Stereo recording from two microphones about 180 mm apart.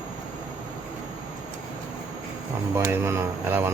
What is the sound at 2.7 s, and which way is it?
Speech, 15° right (ahead or behind).